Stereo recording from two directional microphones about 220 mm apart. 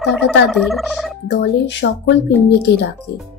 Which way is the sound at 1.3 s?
50° left (ahead or behind).